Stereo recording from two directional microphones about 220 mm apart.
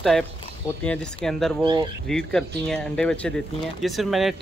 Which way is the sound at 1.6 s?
20° right (ahead or behind).